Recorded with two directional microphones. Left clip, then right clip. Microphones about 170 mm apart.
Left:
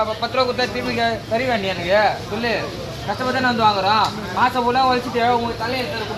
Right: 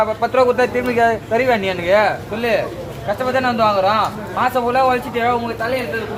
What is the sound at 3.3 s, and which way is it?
A man's voice, 35° right (ahead or behind).